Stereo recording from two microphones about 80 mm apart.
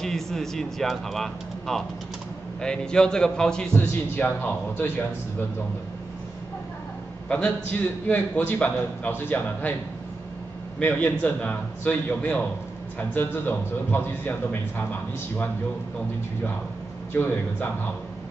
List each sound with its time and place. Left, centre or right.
0.0 s a man's voice: centre
4.2 s a man's voice: left
7.2 s a man's voice: centre
10.8 s a man's voice: left
17.1 s a man's voice: left